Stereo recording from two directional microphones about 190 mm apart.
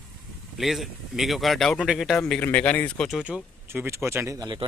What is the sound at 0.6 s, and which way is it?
Speech, centre (ahead or behind).